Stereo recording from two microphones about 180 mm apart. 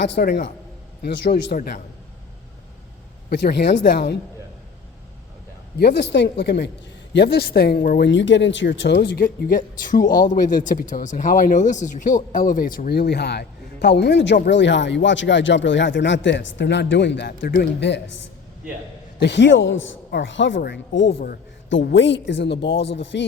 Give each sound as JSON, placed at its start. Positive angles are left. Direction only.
{"t": 0.0, "sound": "speech", "side_deg": 65}
{"t": 3.2, "sound": "speech", "side_deg": 60}
{"t": 5.8, "sound": "speech", "side_deg": 70}
{"t": 19.2, "sound": "speech", "side_deg": 80}
{"t": 20.6, "sound": "speech", "side_deg": 75}